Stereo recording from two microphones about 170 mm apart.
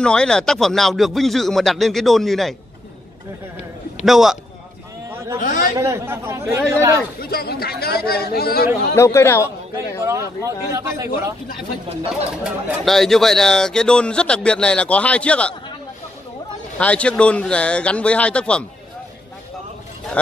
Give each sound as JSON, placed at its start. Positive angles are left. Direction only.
{"t": 0.0, "sound": "speech", "side_deg": 5}
{"t": 4.0, "sound": "speech", "side_deg": 0}
{"t": 5.4, "sound": "speech", "side_deg": 55}
{"t": 5.8, "sound": "speech", "side_deg": -15}
{"t": 7.2, "sound": "speech", "side_deg": 65}
{"t": 8.9, "sound": "speech", "side_deg": 15}
{"t": 10.0, "sound": "speech", "side_deg": -15}
{"t": 12.4, "sound": "speech", "side_deg": 0}
{"t": 16.7, "sound": "speech", "side_deg": 5}